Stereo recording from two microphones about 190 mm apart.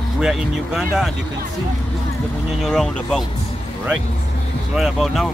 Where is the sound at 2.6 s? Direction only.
Centre (ahead or behind).